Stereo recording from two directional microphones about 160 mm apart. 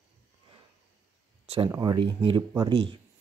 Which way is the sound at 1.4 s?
35° right (ahead or behind).